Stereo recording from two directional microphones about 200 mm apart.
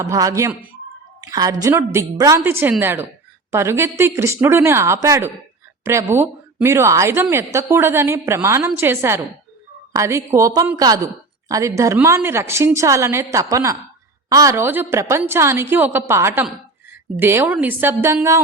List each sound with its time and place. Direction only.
0.0 s a woman's voice: 15° right (ahead or behind)